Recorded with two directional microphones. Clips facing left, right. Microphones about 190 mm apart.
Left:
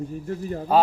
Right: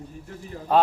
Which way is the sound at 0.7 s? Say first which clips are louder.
Left 1 dB; 5° left (ahead or behind).